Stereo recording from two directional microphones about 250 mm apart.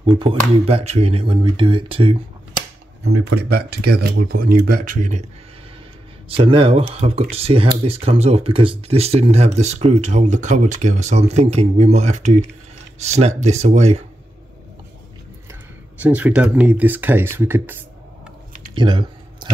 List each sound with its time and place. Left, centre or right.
0.0 s speech: right
3.0 s speech: right
3.3 s speech: right
6.2 s speech: right
16.0 s speech: centre
18.8 s speech: centre
19.4 s chewing: centre